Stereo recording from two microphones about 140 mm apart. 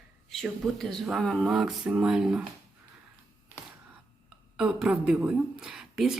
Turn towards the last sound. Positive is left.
turn(degrees=-5)  # may be behind; listen again after turning